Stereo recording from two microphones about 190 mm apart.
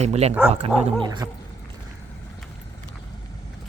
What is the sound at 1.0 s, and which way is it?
Speech, 20° right (ahead or behind).